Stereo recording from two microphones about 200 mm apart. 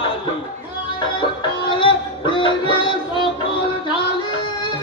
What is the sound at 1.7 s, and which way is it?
Music, 25° left (ahead or behind).